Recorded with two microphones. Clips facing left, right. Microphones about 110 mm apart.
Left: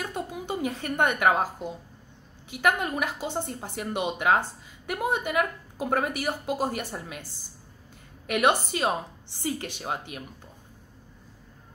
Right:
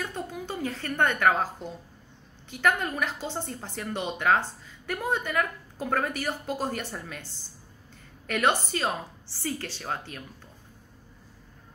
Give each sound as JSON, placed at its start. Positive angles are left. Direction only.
{"t": 0.0, "sound": "a woman's voice", "side_deg": 15}